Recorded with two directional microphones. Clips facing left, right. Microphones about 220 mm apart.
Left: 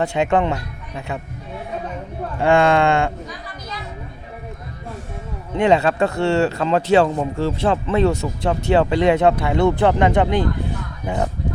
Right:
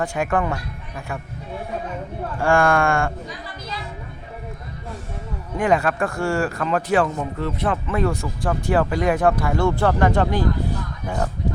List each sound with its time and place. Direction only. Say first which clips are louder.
0.0 s speech: left 4 dB; 25° left (ahead or behind)
2.4 s speech: left 3 dB; 20° left (ahead or behind)
5.5 s speech: left 4 dB; 25° left (ahead or behind)